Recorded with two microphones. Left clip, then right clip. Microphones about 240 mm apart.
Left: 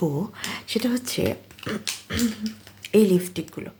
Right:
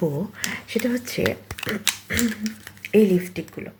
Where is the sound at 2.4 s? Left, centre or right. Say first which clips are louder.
Right 2 dB; right.